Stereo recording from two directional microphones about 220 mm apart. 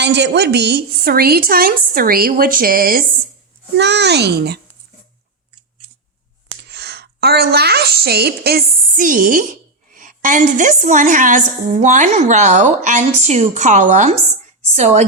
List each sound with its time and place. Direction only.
0.0 s a woman's voice: 50° right (ahead or behind)
3.8 s a woman's voice: 50° right (ahead or behind)
6.7 s a woman's voice: 50° right (ahead or behind); by 14.2 s 35° right (ahead or behind)